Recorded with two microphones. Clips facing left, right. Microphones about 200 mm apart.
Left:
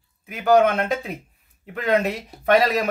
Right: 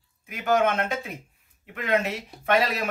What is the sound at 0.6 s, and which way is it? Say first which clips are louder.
Speech: left 4 dB; 35° left (ahead or behind).